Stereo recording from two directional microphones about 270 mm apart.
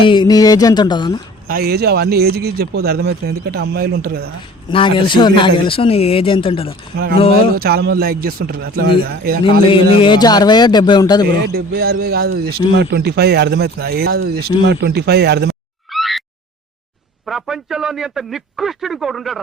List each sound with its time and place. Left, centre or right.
0.0 s a man's voice: centre
1.5 s speech: right
4.7 s a man's voice: centre
6.9 s speech: right
7.2 s a man's voice: left
7.5 s speech: right
9.4 s a man's voice: centre
11.3 s speech: right
15.9 s a sound: centre
17.2 s a man's voice: centre